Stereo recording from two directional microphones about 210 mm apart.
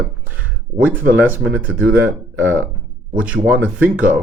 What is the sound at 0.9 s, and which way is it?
Speech, 5° right (ahead or behind).